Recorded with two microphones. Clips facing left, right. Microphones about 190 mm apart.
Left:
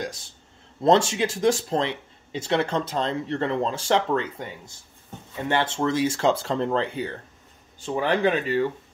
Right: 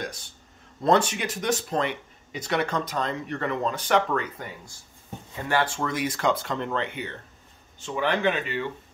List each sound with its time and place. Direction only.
0.0 s speech: 25° left (ahead or behind)